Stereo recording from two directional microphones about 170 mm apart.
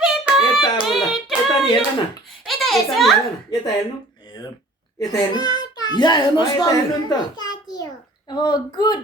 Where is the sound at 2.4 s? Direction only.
Centre (ahead or behind).